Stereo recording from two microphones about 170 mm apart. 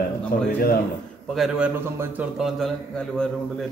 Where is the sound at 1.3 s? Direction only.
5° right (ahead or behind).